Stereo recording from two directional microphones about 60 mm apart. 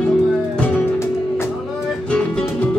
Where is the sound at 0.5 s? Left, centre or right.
Left.